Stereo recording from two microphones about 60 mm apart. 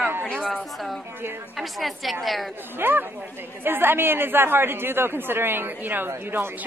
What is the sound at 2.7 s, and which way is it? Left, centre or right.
A man's voice, right.